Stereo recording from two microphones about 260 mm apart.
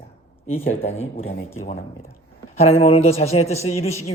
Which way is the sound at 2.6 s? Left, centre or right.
Left.